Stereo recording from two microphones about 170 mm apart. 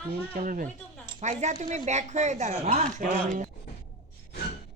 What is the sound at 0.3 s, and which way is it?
Speech, 50° right (ahead or behind).